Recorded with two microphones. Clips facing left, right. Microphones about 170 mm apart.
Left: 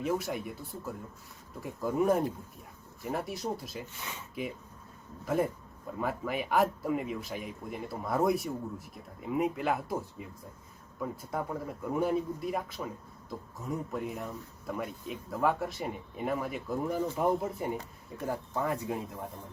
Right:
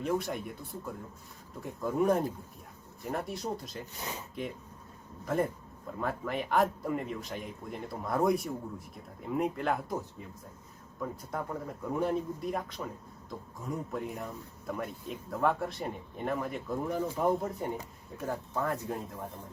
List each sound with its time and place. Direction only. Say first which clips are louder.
0.0 s speech: even; 5° left (ahead or behind)
3.9 s speech: right 3 dB; 40° right (ahead or behind)
5.2 s speech: left 1 dB; 5° left (ahead or behind)